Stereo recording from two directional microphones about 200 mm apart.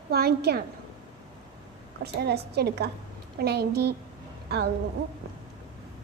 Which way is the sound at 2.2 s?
55° right (ahead or behind).